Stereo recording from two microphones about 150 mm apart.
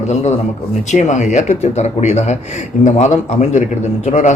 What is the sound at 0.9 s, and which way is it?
Speech, 50° left (ahead or behind).